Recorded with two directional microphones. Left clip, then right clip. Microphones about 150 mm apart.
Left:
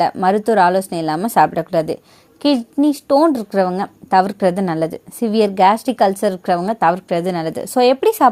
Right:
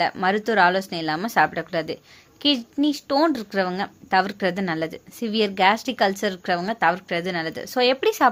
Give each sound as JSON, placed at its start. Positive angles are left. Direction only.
{"t": 0.0, "sound": "a woman's voice", "side_deg": 40}